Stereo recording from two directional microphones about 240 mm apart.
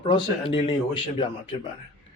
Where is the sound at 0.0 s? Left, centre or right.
Left.